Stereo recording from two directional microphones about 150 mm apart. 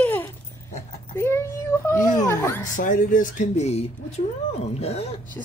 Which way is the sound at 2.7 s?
60° left (ahead or behind).